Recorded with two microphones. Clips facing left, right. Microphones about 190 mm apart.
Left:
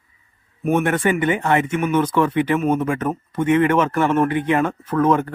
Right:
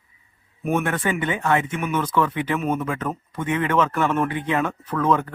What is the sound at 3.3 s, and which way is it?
A man's voice, 60° left (ahead or behind).